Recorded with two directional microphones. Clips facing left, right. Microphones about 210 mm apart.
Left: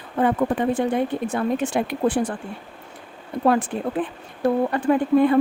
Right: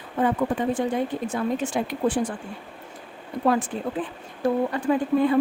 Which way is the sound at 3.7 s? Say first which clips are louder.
Left 3 dB; 60° left (ahead or behind).